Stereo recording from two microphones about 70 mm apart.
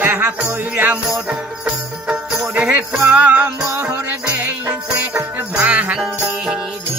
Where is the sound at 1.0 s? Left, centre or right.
Centre.